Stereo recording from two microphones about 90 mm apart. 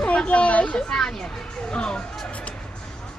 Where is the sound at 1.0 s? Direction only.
5° left (ahead or behind).